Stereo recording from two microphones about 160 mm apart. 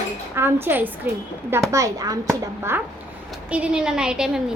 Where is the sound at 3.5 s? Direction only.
5° right (ahead or behind).